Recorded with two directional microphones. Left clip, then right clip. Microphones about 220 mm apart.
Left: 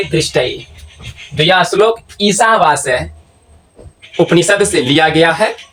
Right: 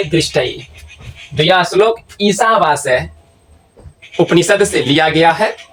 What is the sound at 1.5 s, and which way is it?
Speech, 5° right (ahead or behind).